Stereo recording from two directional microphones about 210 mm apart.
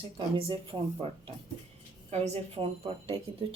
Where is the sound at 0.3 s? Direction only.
25° right (ahead or behind).